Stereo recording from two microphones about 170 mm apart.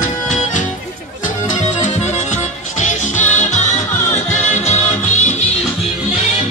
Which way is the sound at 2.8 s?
45° left (ahead or behind).